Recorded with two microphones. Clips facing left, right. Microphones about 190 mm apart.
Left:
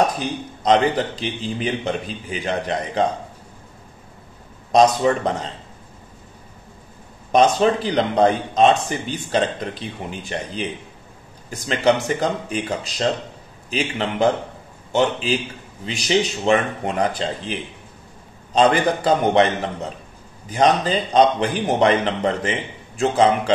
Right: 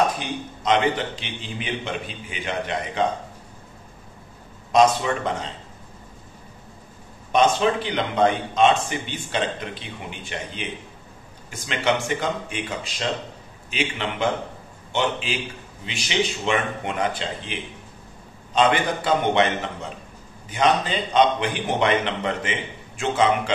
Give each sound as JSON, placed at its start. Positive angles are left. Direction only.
{"t": 0.2, "sound": "a man's voice", "side_deg": 35}
{"t": 4.7, "sound": "a man's voice", "side_deg": 35}
{"t": 7.3, "sound": "a man's voice", "side_deg": 40}
{"t": 20.4, "sound": "a man's voice", "side_deg": 40}